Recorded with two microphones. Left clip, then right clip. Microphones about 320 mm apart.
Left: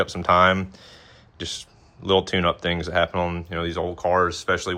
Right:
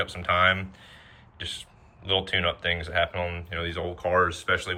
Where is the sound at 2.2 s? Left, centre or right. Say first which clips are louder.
Left 4 dB; centre.